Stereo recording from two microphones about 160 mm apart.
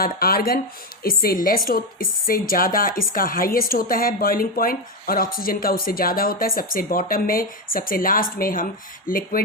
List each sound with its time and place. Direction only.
0.0 s a woman's voice: 70° left (ahead or behind)